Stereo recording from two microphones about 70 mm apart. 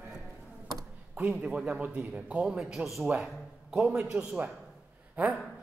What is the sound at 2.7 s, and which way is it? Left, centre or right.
Speech, centre.